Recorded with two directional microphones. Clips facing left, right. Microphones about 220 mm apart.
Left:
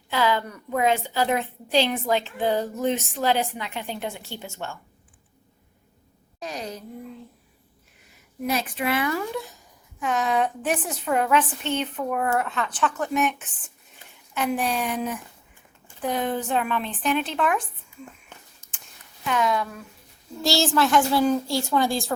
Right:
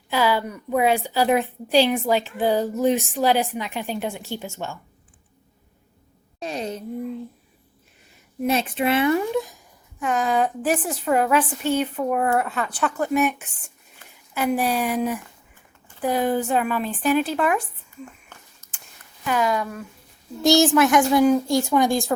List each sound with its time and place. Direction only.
0.1 s a woman's voice: 10° right (ahead or behind)
6.4 s speech: 25° right (ahead or behind)
8.4 s a woman's voice: 25° right (ahead or behind)
10.2 s a woman's voice: centre (ahead or behind)
18.6 s a sound: 30° left (ahead or behind)
19.2 s a woman's voice: 5° right (ahead or behind)
20.4 s a woman's voice: 20° right (ahead or behind)